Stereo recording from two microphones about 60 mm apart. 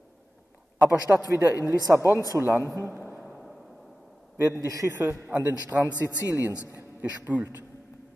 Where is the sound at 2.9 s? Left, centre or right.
Right.